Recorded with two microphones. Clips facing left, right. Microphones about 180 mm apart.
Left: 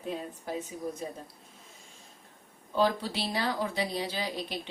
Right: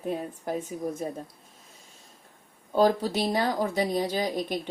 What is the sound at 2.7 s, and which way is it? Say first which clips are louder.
Speech: right 5 dB; 40° right (ahead or behind).